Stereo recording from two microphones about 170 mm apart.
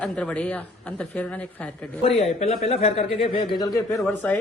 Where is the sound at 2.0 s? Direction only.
35° left (ahead or behind).